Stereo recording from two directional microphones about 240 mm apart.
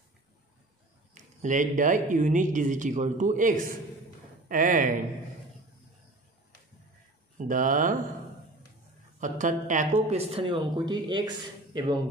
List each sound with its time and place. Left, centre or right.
1.1 s speech: right
7.3 s speech: right
9.2 s a man's voice: right